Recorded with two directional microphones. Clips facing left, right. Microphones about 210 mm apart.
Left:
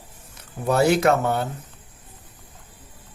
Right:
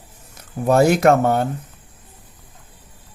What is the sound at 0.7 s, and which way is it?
Speech, 50° right (ahead or behind).